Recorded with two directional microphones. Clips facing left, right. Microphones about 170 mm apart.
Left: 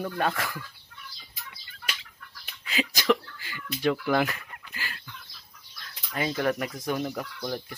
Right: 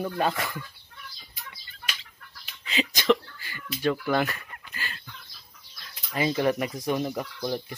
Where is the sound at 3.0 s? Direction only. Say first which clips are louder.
Right 2 dB; 15° left (ahead or behind).